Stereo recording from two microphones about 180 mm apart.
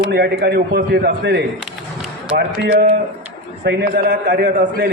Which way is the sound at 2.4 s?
65° right (ahead or behind).